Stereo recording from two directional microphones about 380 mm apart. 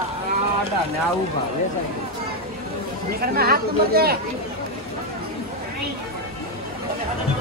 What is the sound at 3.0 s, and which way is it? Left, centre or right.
Chatter, right.